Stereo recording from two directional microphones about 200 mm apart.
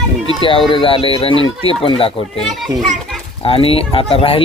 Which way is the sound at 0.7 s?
25° left (ahead or behind).